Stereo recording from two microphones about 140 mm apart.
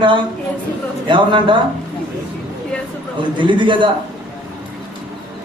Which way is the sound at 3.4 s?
35° right (ahead or behind).